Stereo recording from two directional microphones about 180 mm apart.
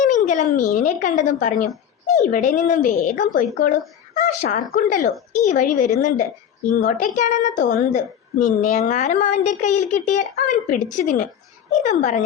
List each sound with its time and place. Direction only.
0.0 s a woman's voice: 45° left (ahead or behind)